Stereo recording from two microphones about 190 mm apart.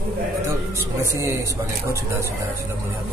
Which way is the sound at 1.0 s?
15° right (ahead or behind).